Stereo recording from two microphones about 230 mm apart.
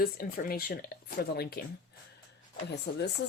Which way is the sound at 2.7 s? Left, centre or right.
Left.